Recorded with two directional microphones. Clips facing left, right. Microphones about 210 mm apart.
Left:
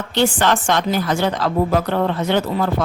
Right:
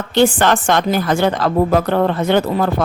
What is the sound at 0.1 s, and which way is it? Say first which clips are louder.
A woman's voice: right 4 dB; 50° right (ahead or behind).